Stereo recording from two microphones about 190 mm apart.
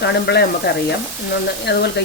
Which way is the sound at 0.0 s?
60° left (ahead or behind).